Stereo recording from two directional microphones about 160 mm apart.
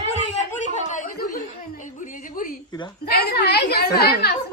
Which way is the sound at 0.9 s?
60° left (ahead or behind).